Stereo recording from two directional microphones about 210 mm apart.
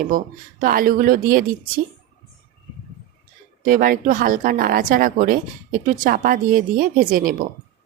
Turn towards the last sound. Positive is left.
turn(degrees=-40)  # may be behind; listen again after turning